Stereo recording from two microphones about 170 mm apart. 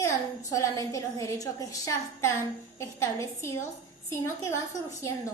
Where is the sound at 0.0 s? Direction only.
20° left (ahead or behind).